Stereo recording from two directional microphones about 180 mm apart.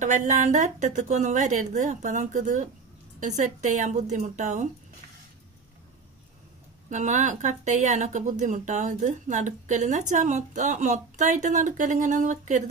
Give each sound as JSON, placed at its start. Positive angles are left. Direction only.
{"t": 0.0, "sound": "speech", "side_deg": -45}
{"t": 6.9, "sound": "speech", "side_deg": -45}